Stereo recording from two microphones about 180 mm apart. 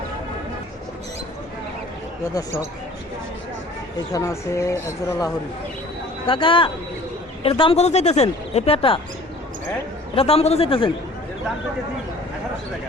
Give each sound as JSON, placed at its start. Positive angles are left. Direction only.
{"t": 4.1, "sound": "speech", "side_deg": 15}
{"t": 6.2, "sound": "speech", "side_deg": 30}
{"t": 10.2, "sound": "speech", "side_deg": 35}